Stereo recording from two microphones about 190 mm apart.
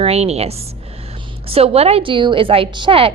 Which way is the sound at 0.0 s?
30° right (ahead or behind).